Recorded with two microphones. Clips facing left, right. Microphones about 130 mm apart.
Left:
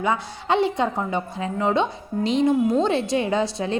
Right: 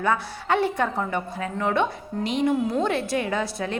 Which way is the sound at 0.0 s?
20° left (ahead or behind).